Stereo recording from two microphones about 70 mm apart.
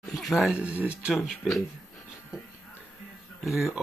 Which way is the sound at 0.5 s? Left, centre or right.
Right.